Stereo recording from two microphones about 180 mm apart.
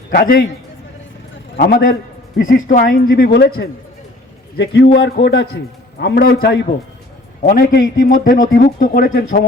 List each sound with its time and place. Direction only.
0.1 s a man's voice: 55° left (ahead or behind)
1.5 s a man's voice: 50° left (ahead or behind)